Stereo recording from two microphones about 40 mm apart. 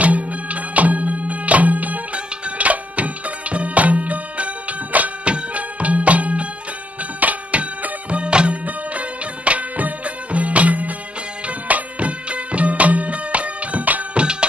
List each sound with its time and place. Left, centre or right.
0.0 s music: right
14.1 s music: right